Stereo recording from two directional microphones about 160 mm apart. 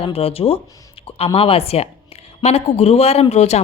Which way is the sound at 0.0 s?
40° left (ahead or behind).